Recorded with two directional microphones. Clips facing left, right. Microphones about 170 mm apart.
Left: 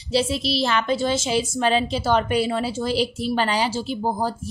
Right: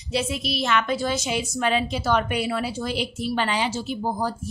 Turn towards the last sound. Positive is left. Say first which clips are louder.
# left 2 dB
turn(degrees=35)  # may be behind; listen again after turning